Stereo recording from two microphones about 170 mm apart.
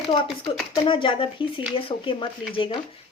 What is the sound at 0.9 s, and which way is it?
Speech, 30° left (ahead or behind).